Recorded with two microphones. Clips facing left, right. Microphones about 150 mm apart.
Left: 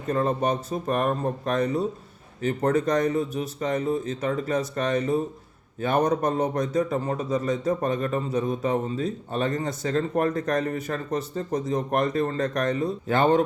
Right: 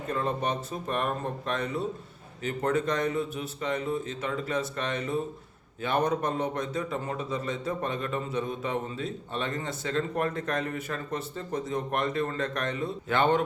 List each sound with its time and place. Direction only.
0.1 s a man's voice: 40° left (ahead or behind)